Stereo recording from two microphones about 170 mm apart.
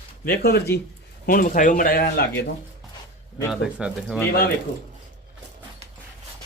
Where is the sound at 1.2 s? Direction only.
55° left (ahead or behind).